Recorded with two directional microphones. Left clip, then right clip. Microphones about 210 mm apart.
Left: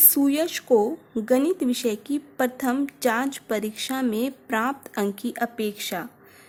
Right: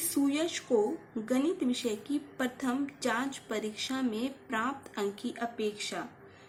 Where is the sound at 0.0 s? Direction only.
45° left (ahead or behind).